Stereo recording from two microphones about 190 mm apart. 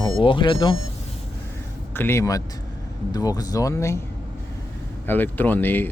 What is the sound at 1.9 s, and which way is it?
Speech, 15° left (ahead or behind).